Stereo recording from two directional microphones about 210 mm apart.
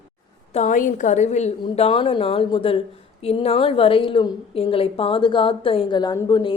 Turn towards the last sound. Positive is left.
turn(degrees=20)  # may be behind; listen again after turning